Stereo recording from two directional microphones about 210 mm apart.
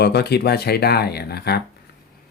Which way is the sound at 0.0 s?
50° left (ahead or behind).